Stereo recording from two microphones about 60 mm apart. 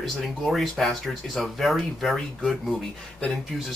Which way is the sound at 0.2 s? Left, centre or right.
Centre.